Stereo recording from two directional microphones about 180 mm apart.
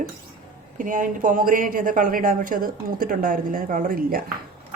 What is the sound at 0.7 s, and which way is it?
Speech, 45° right (ahead or behind).